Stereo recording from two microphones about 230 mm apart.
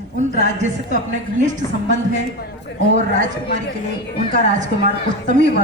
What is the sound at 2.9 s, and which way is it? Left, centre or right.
Speech, right.